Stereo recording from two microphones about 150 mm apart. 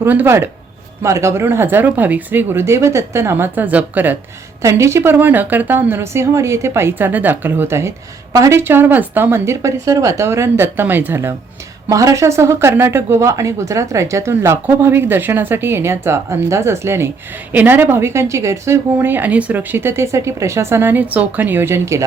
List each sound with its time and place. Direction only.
0.0 s a woman's voice: 15° right (ahead or behind)